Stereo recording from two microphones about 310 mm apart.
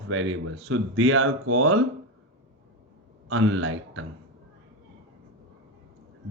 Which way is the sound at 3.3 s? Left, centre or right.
Right.